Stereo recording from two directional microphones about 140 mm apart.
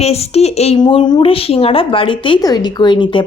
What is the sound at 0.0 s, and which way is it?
Speech, 50° left (ahead or behind).